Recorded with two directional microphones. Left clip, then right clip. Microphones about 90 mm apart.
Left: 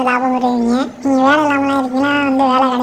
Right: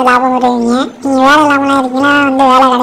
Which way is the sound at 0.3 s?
30° right (ahead or behind).